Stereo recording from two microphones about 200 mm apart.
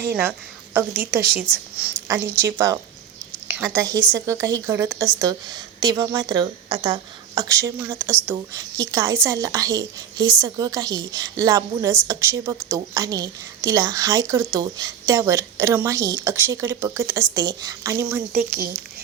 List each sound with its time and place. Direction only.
0.2 s a woman's voice: 10° right (ahead or behind)
18.3 s speech: 45° right (ahead or behind)